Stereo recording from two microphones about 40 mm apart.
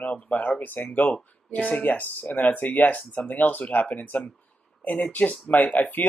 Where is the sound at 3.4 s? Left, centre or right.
Left.